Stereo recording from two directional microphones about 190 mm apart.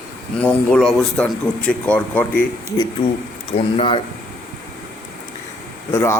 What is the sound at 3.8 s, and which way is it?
Speech, 30° left (ahead or behind).